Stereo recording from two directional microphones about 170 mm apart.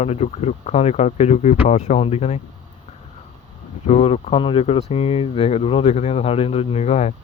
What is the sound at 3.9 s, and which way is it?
Speech, 40° left (ahead or behind).